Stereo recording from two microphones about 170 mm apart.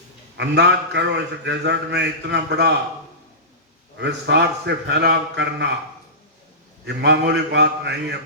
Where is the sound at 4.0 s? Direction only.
85° right.